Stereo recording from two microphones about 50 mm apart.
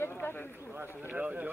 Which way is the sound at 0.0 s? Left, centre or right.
Left.